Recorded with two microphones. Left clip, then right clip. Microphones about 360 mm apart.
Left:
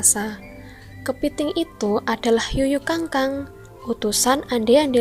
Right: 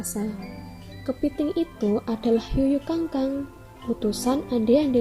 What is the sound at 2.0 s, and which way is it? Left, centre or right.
A woman's voice, left.